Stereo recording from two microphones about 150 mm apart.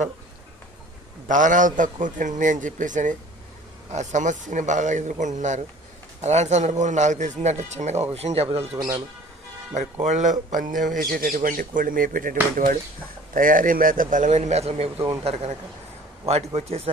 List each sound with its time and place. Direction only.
1.2 s a man's voice: 60° right (ahead or behind); by 8.7 s 45° right (ahead or behind)
8.7 s speech: 20° right (ahead or behind)
9.8 s speech: 50° right (ahead or behind)
10.5 s a man's voice: 60° right (ahead or behind); by 16.9 s 45° right (ahead or behind)